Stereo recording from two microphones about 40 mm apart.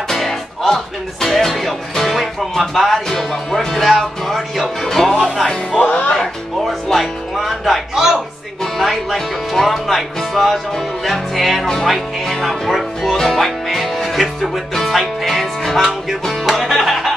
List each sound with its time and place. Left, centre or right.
0.1 s music: centre
1.2 s speech: centre
5.1 s speech: centre
5.8 s music: left
6.9 s speech: centre
7.9 s speech: centre
8.7 s speech: centre